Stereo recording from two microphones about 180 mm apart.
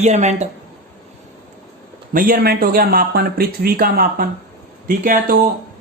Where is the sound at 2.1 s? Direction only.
50° right (ahead or behind).